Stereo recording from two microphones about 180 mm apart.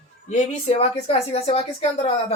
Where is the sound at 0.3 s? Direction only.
40° left (ahead or behind).